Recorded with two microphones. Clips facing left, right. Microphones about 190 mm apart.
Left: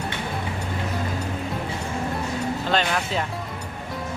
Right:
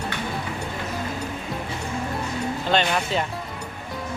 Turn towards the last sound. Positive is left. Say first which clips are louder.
# right 1 dB
turn(degrees=0)  # may be behind; listen again after turning